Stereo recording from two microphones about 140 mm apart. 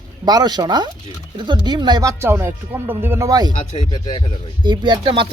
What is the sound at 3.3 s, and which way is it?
Speech, 30° right (ahead or behind).